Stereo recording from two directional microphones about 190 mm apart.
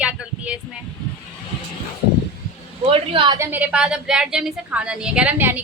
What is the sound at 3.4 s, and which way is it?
A woman's voice, 10° right (ahead or behind).